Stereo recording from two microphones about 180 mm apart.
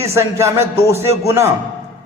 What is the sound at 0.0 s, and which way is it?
A man's voice, 15° right (ahead or behind).